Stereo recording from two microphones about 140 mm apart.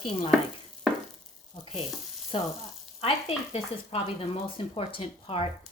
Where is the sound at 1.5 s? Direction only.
40° left (ahead or behind).